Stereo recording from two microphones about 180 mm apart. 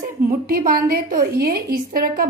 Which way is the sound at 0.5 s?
55° right (ahead or behind).